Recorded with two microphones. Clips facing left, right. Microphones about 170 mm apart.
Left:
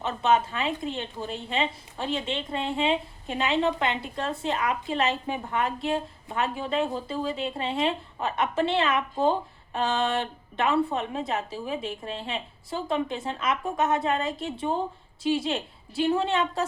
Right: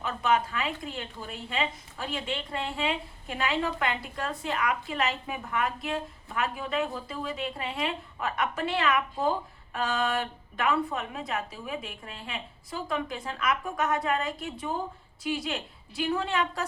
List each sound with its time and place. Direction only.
0.0 s a woman's voice: 25° left (ahead or behind)